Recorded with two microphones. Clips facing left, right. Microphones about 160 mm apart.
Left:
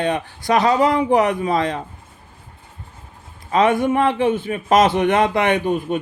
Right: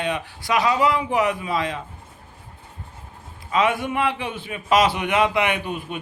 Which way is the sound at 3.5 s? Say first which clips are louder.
Left 5 dB; 50° left (ahead or behind).